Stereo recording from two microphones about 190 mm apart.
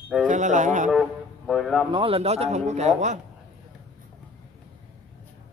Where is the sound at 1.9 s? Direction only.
30° right (ahead or behind).